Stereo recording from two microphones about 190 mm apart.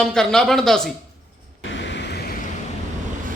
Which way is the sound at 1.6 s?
75° left (ahead or behind).